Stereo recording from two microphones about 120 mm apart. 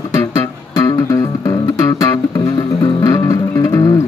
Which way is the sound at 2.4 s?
45° left (ahead or behind).